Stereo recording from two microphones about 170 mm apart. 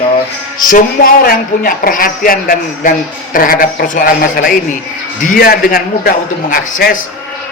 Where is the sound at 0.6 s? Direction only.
55° left (ahead or behind).